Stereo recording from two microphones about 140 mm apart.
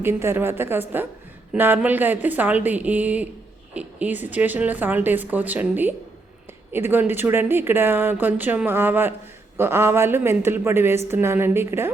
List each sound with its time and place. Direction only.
0.0 s speech: 15° right (ahead or behind)